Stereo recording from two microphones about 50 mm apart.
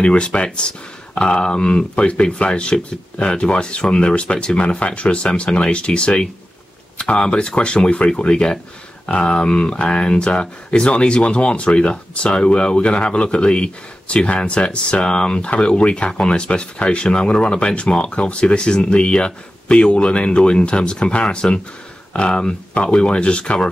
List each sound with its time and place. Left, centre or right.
0.0 s speech: centre